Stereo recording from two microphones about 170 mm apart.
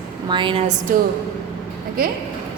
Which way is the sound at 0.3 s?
30° right (ahead or behind).